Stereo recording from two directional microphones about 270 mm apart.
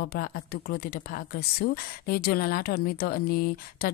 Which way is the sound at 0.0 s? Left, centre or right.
Left.